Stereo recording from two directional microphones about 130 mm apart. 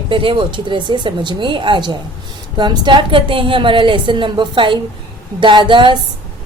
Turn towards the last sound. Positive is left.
turn(degrees=-40)  # may be behind; listen again after turning